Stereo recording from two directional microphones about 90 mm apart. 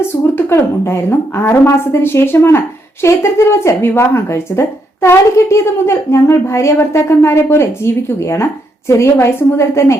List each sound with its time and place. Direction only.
0.0 s a woman's voice: 30° left (ahead or behind)
9.2 s a woman's voice: 30° left (ahead or behind)